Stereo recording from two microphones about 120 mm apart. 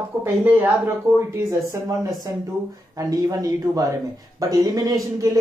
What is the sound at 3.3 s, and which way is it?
Speech, 30° right (ahead or behind).